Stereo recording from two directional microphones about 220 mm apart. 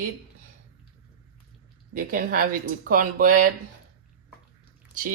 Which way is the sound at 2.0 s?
40° right (ahead or behind).